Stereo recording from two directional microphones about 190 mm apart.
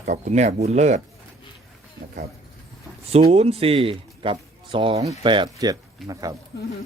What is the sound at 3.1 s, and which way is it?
Speech, 35° right (ahead or behind).